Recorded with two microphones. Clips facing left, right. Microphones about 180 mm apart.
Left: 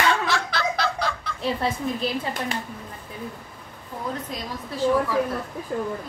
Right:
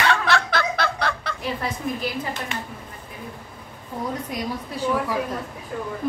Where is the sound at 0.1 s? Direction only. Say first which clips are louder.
Right 3 dB; 60° right (ahead or behind).